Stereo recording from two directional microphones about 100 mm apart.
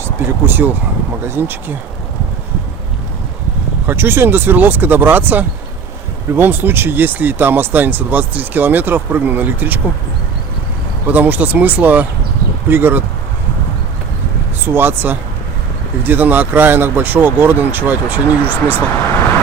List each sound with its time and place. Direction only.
0.0 s speech: 20° right (ahead or behind)
3.8 s speech: 20° right (ahead or behind)
11.0 s speech: 20° right (ahead or behind)
14.7 s speech: 20° right (ahead or behind)